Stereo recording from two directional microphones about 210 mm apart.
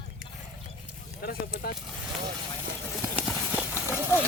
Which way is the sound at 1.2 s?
45° left (ahead or behind).